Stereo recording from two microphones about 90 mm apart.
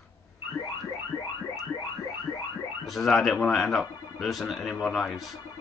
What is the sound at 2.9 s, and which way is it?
Speech, centre (ahead or behind).